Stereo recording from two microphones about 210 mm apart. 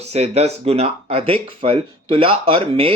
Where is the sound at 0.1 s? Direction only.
30° right (ahead or behind).